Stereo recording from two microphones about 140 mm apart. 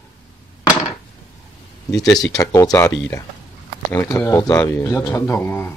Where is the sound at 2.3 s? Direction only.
25° left (ahead or behind).